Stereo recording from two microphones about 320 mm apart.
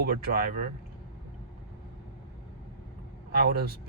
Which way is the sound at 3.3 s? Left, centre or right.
Right.